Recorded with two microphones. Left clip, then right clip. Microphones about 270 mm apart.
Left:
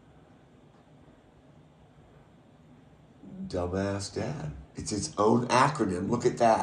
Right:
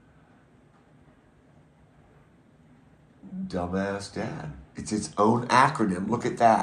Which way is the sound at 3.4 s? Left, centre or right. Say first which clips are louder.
Right 1 dB; centre.